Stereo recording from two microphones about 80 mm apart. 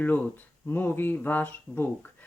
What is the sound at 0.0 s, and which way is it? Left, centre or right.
Speech, left.